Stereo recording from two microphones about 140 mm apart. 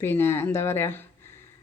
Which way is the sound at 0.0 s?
15° left (ahead or behind).